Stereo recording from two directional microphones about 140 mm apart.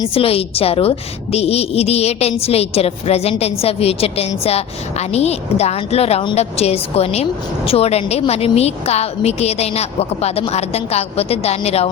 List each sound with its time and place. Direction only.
0.1 s a woman's voice: 45° left (ahead or behind)